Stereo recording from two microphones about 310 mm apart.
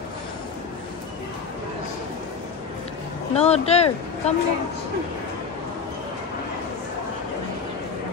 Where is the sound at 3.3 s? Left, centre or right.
Centre.